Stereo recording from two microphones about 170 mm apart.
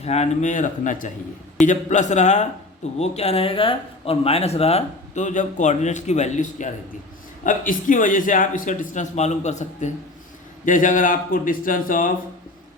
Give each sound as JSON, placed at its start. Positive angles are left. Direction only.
{"t": 0.0, "sound": "a man's voice", "side_deg": 40}